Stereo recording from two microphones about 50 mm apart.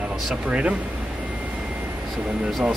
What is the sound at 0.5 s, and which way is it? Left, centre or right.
Speech, right.